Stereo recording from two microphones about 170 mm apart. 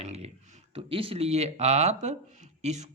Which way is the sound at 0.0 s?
40° right (ahead or behind).